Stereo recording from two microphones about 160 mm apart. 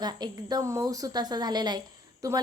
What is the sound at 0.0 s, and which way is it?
A woman's voice, 25° right (ahead or behind).